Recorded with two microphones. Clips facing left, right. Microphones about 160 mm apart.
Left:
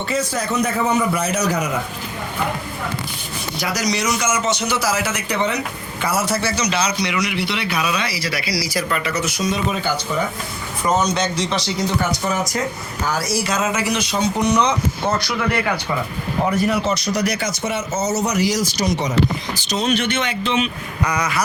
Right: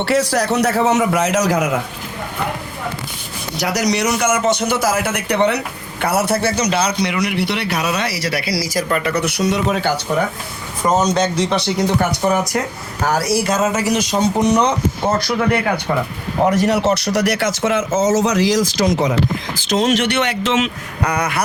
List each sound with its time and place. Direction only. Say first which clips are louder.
0.0 s a man's voice: right 6 dB; 75° right (ahead or behind)
3.6 s a man's voice: right 5 dB; 70° right (ahead or behind)
8.6 s a man's voice: right 3 dB; 45° right (ahead or behind); by 10.2 s 70° right (ahead or behind)
11.0 s a man's voice: right 4 dB; 45° right (ahead or behind); by 11.9 s 60° right (ahead or behind)
13.0 s a man's voice: right 5 dB; 65° right (ahead or behind); by 14.7 s 50° right (ahead or behind)
16.5 s speech: right 4 dB; 80° right; by 21.4 s 55° right (ahead or behind)